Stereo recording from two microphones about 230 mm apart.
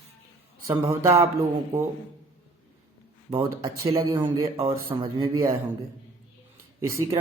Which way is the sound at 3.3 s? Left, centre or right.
Centre.